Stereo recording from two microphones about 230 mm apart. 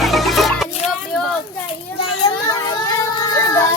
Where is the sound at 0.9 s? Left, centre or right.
Centre.